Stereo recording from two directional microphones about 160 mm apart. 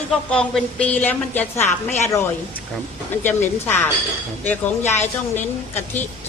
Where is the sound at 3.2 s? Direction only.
10° left (ahead or behind).